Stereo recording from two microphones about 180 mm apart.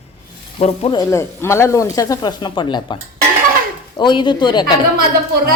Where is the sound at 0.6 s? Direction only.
30° left (ahead or behind).